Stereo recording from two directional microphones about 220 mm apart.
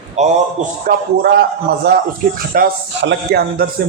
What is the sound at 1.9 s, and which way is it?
A man's voice, 50° right (ahead or behind).